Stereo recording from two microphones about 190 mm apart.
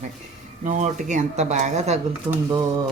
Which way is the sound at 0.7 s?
40° right (ahead or behind).